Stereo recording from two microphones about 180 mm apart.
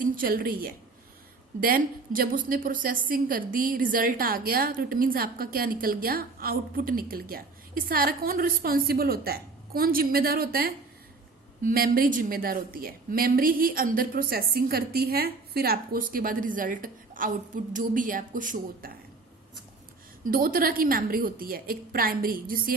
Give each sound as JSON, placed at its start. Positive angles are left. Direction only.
{"t": 0.0, "sound": "a woman's voice", "side_deg": -50}
{"t": 20.2, "sound": "a woman's voice", "side_deg": -50}